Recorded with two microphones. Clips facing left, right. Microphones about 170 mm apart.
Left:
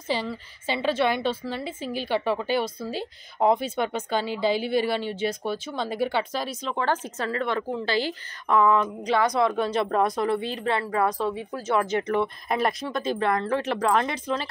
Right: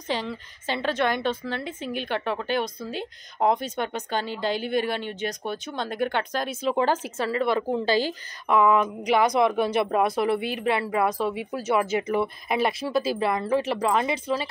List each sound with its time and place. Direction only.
0.1 s a woman's voice: 10° left (ahead or behind)
4.6 s speech: 50° right (ahead or behind)
5.8 s speech: 5° left (ahead or behind)
6.6 s a woman's voice: 15° right (ahead or behind)